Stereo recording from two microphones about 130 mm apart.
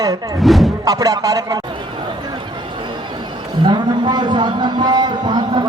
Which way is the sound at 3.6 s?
35° right (ahead or behind).